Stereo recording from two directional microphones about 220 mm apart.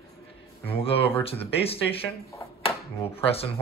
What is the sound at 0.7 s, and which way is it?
Speech, 25° left (ahead or behind).